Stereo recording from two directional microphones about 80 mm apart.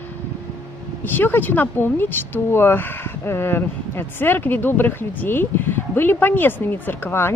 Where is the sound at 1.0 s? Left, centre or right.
Left.